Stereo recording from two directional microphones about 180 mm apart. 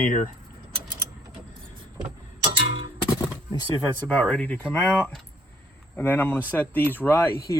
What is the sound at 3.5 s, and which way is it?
Speech, 10° left (ahead or behind).